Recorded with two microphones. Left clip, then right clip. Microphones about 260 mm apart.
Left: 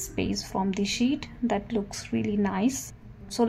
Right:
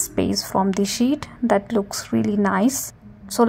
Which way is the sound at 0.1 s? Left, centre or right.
Right.